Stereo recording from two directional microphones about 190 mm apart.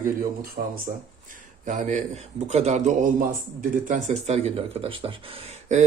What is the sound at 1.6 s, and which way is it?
Speech, 40° right (ahead or behind).